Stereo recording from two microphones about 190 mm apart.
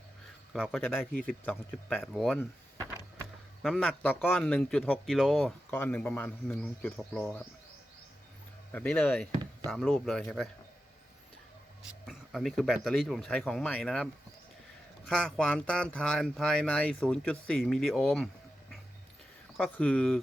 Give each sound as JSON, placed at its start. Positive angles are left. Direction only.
{"t": 0.5, "sound": "a man's voice", "side_deg": 0}
{"t": 3.6, "sound": "a man's voice", "side_deg": 0}
{"t": 8.7, "sound": "a man's voice", "side_deg": 5}
{"t": 9.3, "sound": "a sound", "side_deg": -20}
{"t": 9.6, "sound": "a man's voice", "side_deg": 5}
{"t": 12.0, "sound": "a man's voice", "side_deg": 0}
{"t": 19.5, "sound": "a man's voice", "side_deg": 5}